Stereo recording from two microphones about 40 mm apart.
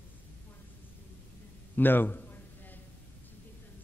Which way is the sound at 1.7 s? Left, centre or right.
Left.